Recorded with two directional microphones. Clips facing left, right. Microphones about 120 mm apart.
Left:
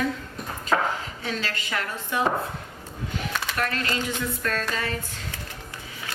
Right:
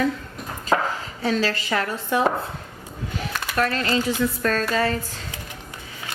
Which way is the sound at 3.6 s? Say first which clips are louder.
Right 7 dB; 40° right (ahead or behind).